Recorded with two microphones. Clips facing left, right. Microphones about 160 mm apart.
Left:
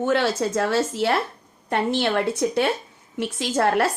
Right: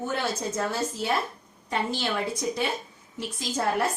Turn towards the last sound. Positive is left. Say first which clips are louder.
# left 6 dB
turn(degrees=75)  # may be behind; listen again after turning